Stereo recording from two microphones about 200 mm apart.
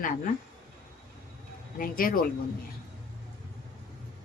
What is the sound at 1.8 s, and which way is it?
Speech, 45° left (ahead or behind).